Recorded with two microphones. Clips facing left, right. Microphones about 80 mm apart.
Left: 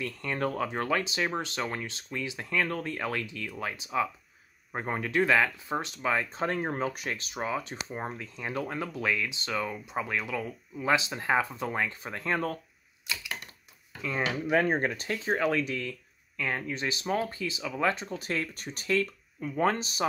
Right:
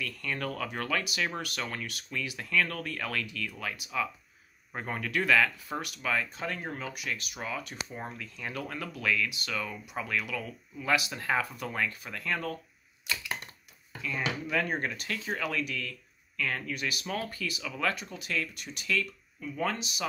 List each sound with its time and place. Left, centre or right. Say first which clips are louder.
0.0 s speech: left 4 dB; left
14.0 s speech: left 3 dB; left